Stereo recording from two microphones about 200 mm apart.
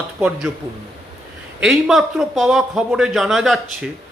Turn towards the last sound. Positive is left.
turn(degrees=0)  # may be behind; listen again after turning